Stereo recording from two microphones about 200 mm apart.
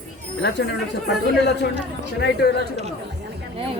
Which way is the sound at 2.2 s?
55° left (ahead or behind).